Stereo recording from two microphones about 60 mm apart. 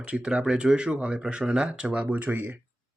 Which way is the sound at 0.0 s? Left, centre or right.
Centre.